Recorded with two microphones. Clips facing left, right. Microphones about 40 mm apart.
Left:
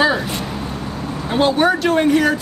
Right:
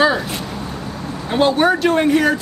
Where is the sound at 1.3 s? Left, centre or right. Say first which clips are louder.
Right 1 dB; centre.